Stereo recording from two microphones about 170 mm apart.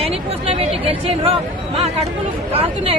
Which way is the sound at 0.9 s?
35° right (ahead or behind).